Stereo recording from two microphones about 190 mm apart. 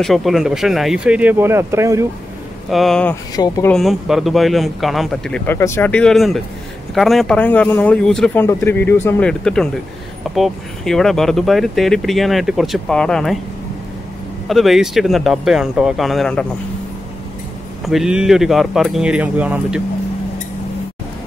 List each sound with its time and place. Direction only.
0.0 s speech: centre (ahead or behind)
2.7 s speech: centre (ahead or behind)
3.3 s speech: 20° left (ahead or behind)
3.7 s speech: centre (ahead or behind)
14.5 s speech: centre (ahead or behind)
17.8 s speech: centre (ahead or behind)